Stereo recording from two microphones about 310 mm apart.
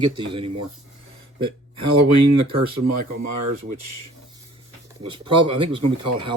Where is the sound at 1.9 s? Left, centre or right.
Right.